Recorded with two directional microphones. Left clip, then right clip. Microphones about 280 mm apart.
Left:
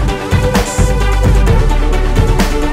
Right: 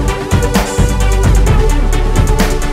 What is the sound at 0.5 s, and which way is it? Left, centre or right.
Music, centre.